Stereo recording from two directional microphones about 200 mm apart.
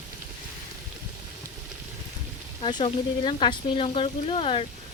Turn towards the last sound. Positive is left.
turn(degrees=25)  # may be behind; listen again after turning